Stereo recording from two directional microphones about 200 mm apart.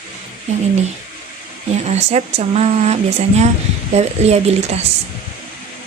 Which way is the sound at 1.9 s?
35° right (ahead or behind).